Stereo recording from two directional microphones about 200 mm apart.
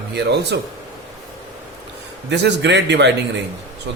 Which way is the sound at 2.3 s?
60° right (ahead or behind).